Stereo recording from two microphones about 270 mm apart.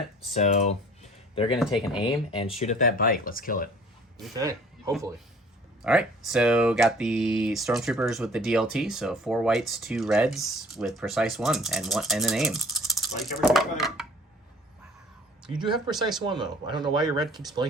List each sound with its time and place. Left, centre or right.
0.3 s computer keyboard: left
2.0 s speech: centre
2.6 s speech: left
5.8 s speech: centre
15.4 s speech: centre